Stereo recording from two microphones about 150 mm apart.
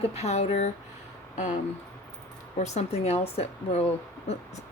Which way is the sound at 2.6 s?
45° left (ahead or behind).